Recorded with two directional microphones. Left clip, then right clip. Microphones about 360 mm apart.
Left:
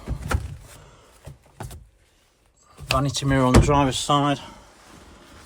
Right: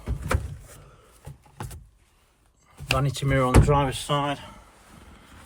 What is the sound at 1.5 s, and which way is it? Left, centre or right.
Vehicle, centre.